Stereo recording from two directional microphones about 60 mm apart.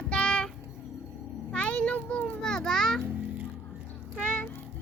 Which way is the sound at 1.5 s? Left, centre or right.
Centre.